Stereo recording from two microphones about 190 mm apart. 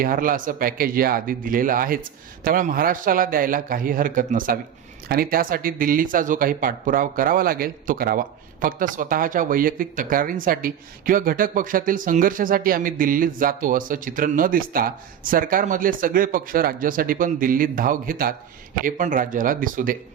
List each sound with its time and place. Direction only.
0.0 s speech: 45° right (ahead or behind)